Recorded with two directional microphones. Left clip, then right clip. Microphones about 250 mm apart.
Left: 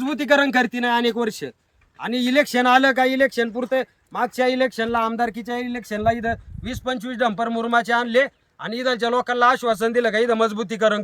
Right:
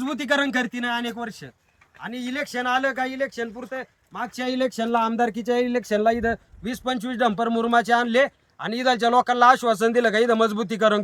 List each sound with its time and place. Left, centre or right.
0.0 s speech: centre